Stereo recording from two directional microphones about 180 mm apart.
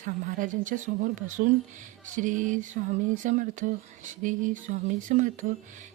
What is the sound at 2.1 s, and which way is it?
Speech, 45° right (ahead or behind).